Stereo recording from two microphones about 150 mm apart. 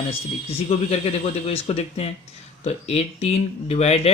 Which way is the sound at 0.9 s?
45° left (ahead or behind).